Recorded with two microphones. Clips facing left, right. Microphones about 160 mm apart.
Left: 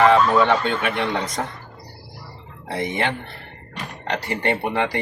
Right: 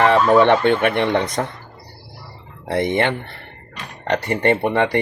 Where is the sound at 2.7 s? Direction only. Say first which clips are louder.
Right 5 dB; 60° right (ahead or behind).